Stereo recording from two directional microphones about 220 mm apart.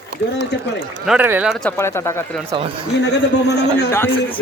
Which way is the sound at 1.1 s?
10° right (ahead or behind).